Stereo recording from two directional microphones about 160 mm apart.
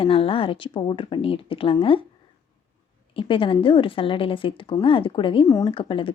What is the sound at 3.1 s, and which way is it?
A woman's voice, 35° left (ahead or behind).